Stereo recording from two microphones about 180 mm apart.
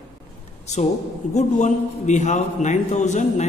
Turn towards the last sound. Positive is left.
turn(degrees=40)  # may be behind; listen again after turning